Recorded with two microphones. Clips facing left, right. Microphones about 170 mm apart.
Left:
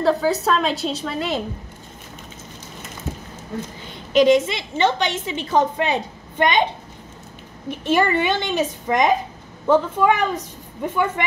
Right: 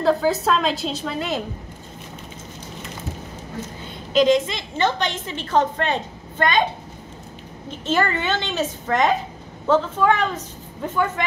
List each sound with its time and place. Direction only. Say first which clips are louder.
0.0 s a woman's voice: even; centre (ahead or behind)
4.2 s a woman's voice: left 2 dB; 5° left (ahead or behind)
7.7 s a woman's voice: left 3 dB; 15° left (ahead or behind)